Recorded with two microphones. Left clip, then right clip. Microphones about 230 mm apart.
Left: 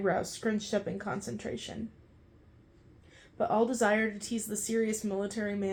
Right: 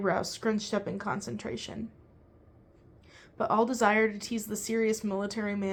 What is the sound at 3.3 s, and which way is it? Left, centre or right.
Speech, right.